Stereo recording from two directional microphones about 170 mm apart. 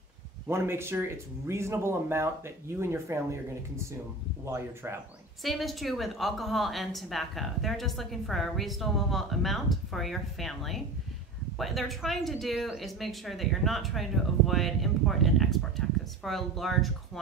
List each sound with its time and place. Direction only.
0.5 s speech: 15° right (ahead or behind)
5.4 s a woman's voice: centre (ahead or behind)